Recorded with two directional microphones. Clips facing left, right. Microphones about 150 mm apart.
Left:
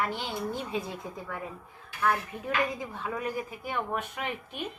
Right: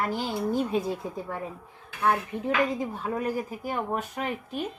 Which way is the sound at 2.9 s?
35° right (ahead or behind).